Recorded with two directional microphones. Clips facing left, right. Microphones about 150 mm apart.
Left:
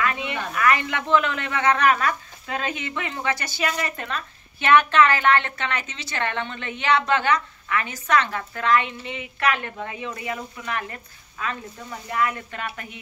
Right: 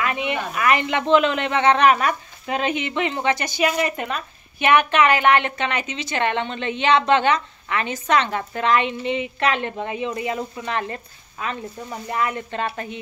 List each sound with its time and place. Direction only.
0.0 s speech: 20° right (ahead or behind)